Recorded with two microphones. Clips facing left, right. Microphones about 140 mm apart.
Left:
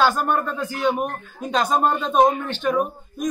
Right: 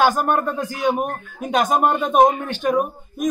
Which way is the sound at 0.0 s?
15° right (ahead or behind).